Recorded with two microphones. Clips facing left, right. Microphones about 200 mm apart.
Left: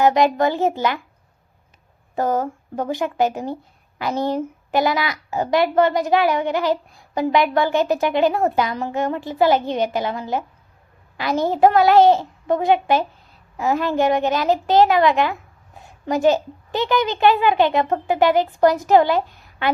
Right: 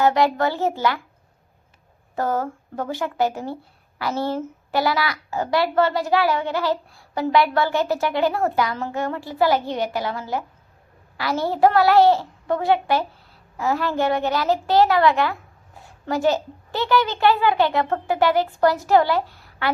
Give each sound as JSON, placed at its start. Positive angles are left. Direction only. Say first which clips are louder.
{"t": 0.0, "sound": "speech", "louder": "left 2 dB", "side_deg": 20}
{"t": 2.1, "sound": "speech", "louder": "left 3 dB", "side_deg": 15}